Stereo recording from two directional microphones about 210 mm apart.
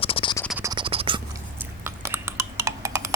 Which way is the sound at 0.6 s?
20° right (ahead or behind).